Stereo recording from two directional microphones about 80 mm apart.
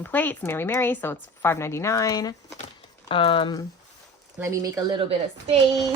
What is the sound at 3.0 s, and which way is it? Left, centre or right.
Speech, left.